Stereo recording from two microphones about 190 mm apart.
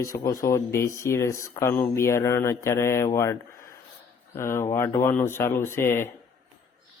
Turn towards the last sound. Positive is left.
turn(degrees=15)  # may be behind; listen again after turning